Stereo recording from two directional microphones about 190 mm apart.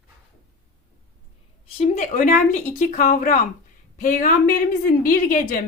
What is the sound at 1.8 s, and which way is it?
A woman's voice, 35° left (ahead or behind).